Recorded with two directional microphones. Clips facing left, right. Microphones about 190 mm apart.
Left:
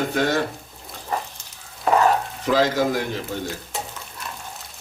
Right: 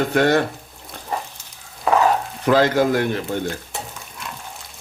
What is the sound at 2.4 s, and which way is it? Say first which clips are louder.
Speech: right 4 dB; 60° right (ahead or behind).